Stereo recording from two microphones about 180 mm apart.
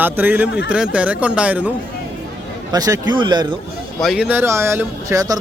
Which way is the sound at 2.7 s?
20° right (ahead or behind).